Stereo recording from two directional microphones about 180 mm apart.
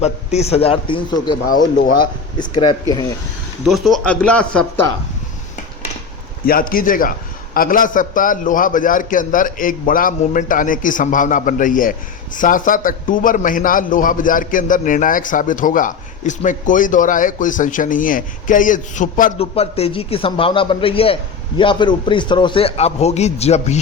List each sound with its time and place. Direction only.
0.0 s a man's voice: 35° left (ahead or behind)
1.5 s a man's voice: 50° left (ahead or behind)
2.0 s speech: 25° left (ahead or behind)
3.7 s speech: centre (ahead or behind)
6.4 s a man's voice: 55° left (ahead or behind)
19.4 s a man's voice: 35° left (ahead or behind)